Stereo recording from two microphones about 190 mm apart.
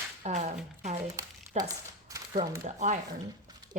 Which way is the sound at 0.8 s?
35° right (ahead or behind).